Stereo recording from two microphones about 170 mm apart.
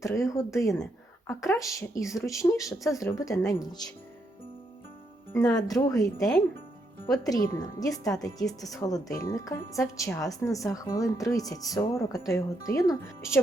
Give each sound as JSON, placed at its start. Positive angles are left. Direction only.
{"t": 0.0, "sound": "speech", "side_deg": 20}
{"t": 5.3, "sound": "speech", "side_deg": 20}
{"t": 7.5, "sound": "speech", "side_deg": 20}